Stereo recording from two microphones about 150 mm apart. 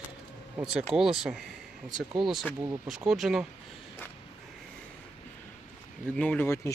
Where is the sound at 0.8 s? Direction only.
5° right (ahead or behind).